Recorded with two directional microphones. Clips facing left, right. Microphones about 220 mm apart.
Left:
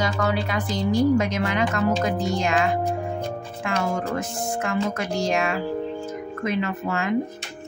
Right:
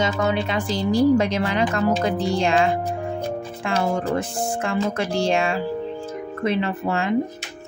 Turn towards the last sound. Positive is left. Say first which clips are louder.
# right 2 dB
turn(degrees=-30)  # may be behind; listen again after turning